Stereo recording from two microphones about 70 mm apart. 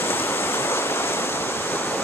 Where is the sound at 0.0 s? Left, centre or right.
Left.